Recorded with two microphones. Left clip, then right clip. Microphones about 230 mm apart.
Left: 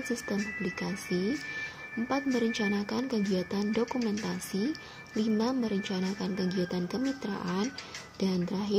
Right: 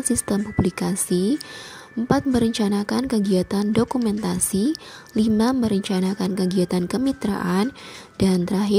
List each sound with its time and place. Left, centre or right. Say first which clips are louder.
0.1 s a woman's voice: right 9 dB; right